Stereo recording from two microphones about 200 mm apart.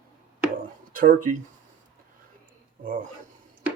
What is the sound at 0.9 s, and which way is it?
Speech, 40° right (ahead or behind).